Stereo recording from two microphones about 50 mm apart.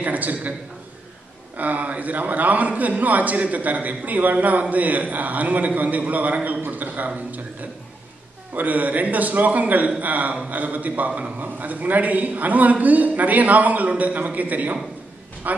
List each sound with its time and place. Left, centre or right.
0.0 s a man's voice: right
1.6 s a man's voice: right
8.5 s a man's voice: right